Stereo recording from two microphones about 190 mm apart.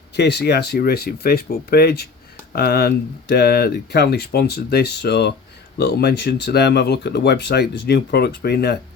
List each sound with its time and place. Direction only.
0.2 s speech: 60° left (ahead or behind)